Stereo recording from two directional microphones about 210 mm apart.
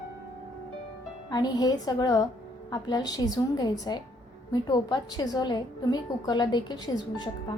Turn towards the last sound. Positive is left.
turn(degrees=20)  # may be behind; listen again after turning